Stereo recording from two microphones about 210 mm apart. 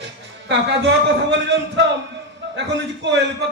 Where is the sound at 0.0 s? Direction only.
55° right (ahead or behind).